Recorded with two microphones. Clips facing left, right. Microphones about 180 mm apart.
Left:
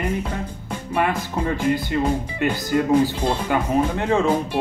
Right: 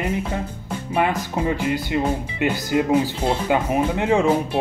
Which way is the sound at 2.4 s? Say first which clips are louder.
Right 1 dB; 15° right (ahead or behind).